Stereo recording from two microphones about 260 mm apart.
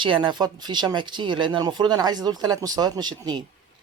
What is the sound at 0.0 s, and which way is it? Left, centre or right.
Speech, centre.